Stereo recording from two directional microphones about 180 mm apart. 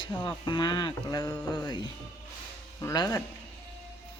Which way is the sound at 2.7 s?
20° left (ahead or behind).